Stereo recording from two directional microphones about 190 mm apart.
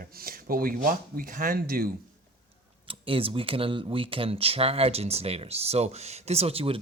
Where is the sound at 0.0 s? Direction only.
50° right (ahead or behind).